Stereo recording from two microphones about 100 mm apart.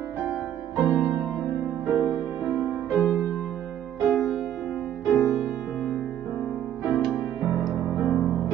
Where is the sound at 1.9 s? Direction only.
30° right (ahead or behind).